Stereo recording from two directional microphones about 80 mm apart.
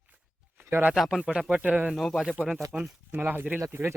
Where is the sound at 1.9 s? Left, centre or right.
Centre.